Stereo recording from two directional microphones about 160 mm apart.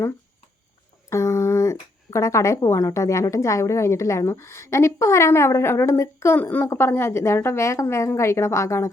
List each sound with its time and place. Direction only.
1.1 s speech: 15° left (ahead or behind)